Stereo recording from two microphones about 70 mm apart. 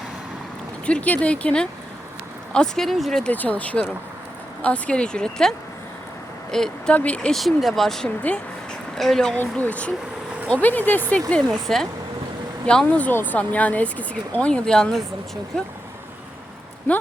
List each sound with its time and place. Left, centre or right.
0.9 s speech: centre
3.3 s speech: left
6.9 s speech: centre
7.3 s speech: centre
9.3 s speech: left
11.4 s speech: centre